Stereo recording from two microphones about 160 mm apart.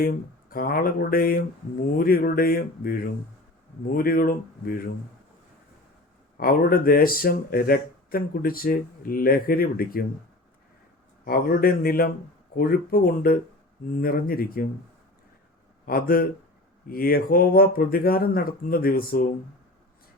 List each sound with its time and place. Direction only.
0.0 s speech: 65° left (ahead or behind)
6.3 s speech: 65° left (ahead or behind)
11.3 s speech: 65° left (ahead or behind)
15.9 s speech: 65° left (ahead or behind)